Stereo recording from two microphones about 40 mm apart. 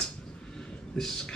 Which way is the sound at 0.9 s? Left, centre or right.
Centre.